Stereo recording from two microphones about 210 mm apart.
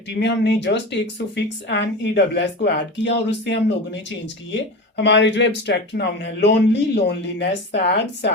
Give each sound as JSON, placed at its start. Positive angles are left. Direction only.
{"t": 0.2, "sound": "speech", "side_deg": 55}